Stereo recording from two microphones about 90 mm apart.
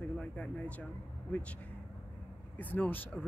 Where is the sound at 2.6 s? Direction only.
20° left (ahead or behind).